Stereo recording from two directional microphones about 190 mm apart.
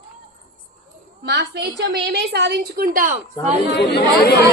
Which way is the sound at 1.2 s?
65° right (ahead or behind).